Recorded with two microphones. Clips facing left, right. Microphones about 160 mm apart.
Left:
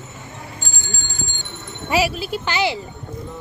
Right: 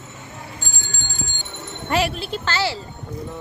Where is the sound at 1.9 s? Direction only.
5° left (ahead or behind).